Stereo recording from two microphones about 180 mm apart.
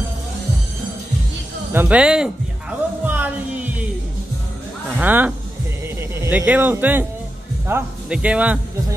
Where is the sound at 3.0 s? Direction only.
10° right (ahead or behind).